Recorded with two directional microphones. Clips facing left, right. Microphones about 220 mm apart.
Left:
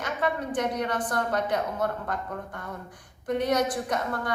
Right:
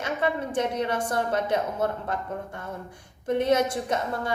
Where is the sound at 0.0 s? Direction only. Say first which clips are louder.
Right 2 dB; 25° right (ahead or behind).